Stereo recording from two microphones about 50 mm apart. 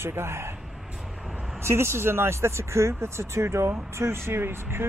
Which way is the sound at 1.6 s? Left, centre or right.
Right.